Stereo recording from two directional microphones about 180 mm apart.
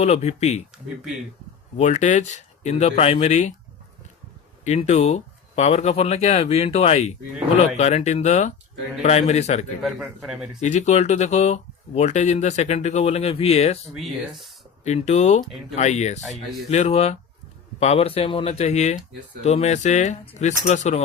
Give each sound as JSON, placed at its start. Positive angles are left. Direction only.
{"t": 0.0, "sound": "speech", "side_deg": 35}
{"t": 1.7, "sound": "speech", "side_deg": 40}
{"t": 4.6, "sound": "speech", "side_deg": 40}
{"t": 9.8, "sound": "a man's voice", "side_deg": 0}
{"t": 10.6, "sound": "speech", "side_deg": 40}
{"t": 13.9, "sound": "a man's voice", "side_deg": 0}
{"t": 14.8, "sound": "speech", "side_deg": 40}